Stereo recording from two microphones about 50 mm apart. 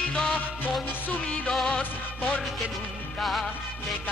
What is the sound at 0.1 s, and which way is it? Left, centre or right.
Music, left.